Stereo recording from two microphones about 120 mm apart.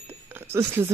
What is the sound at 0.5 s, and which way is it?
Speech, 20° right (ahead or behind).